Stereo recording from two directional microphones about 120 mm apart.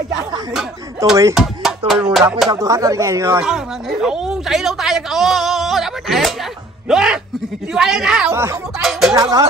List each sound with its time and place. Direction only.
0.1 s chatter: 5° right (ahead or behind)
1.3 s music: centre (ahead or behind)
2.5 s speech: 30° right (ahead or behind)
3.4 s a woman's voice: 5° right (ahead or behind)
8.3 s speech: 20° right (ahead or behind)